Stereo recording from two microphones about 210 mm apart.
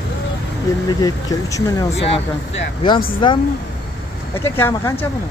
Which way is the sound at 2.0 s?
30° left (ahead or behind).